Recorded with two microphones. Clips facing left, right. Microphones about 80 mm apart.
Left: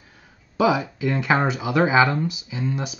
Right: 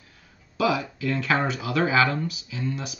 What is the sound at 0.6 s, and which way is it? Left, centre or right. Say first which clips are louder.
Speech: left 4 dB; left.